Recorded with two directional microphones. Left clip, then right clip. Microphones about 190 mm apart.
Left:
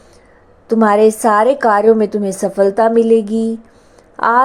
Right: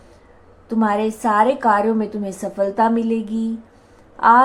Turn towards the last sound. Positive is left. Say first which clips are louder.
# even
turn(degrees=35)  # may be behind; listen again after turning